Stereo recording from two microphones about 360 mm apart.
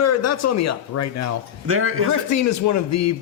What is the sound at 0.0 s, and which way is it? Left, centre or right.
A man's voice, left.